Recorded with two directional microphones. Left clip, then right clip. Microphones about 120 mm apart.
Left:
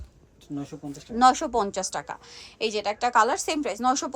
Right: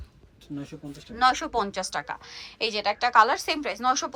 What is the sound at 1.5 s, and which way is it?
A woman's voice, 40° left (ahead or behind).